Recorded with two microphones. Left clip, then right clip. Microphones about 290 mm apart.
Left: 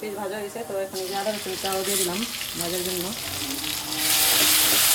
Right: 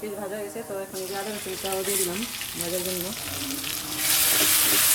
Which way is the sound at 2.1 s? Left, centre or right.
Centre.